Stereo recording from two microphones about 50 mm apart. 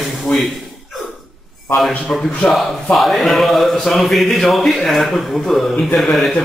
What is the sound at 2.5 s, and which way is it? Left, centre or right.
A man's voice, centre.